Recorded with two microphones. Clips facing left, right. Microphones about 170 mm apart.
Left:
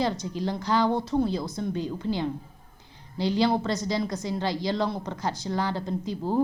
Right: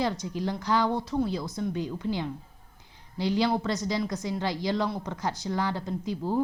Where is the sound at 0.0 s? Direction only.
15° right (ahead or behind).